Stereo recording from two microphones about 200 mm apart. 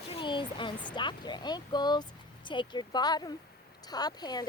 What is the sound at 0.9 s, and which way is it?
Speech, 20° left (ahead or behind).